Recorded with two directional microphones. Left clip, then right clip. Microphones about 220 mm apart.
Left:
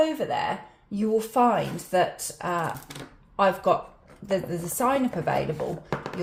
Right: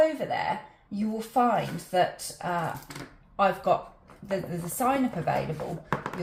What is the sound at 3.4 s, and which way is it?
Speech, 40° left (ahead or behind).